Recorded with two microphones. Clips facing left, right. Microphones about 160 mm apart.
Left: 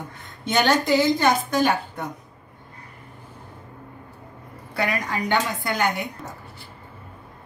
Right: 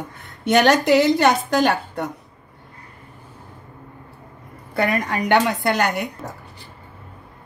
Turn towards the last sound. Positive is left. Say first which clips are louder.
# right 4 dB
turn(degrees=-70)  # may be behind; listen again after turning